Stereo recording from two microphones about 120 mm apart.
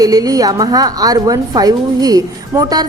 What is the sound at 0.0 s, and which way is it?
A woman's voice, 30° right (ahead or behind).